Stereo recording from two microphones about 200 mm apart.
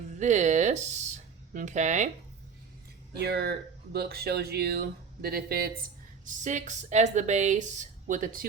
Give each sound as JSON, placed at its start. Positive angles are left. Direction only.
{"t": 0.2, "sound": "speech", "side_deg": -35}
{"t": 3.2, "sound": "speech", "side_deg": -55}
{"t": 6.2, "sound": "speech", "side_deg": -40}